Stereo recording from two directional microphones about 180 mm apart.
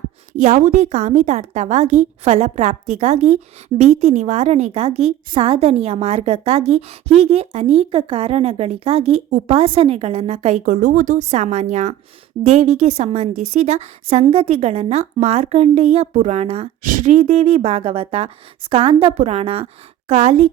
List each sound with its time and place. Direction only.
0.3 s a woman's voice: 40° right (ahead or behind)